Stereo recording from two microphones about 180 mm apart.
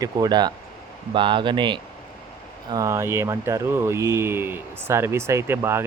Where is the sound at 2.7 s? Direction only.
15° right (ahead or behind).